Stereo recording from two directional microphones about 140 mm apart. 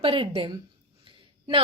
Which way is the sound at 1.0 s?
35° right (ahead or behind).